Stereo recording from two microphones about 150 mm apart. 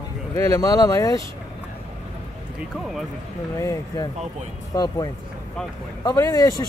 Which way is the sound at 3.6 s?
20° left (ahead or behind).